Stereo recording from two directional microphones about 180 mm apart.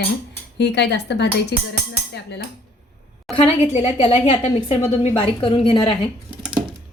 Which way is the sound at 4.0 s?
30° left (ahead or behind).